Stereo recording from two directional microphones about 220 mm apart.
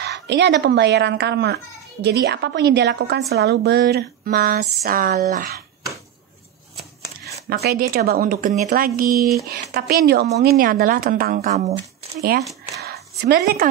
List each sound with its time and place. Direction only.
0.0 s a woman's voice: 50° right (ahead or behind)
7.4 s a woman's voice: 45° right (ahead or behind)
12.8 s a sound: 45° right (ahead or behind)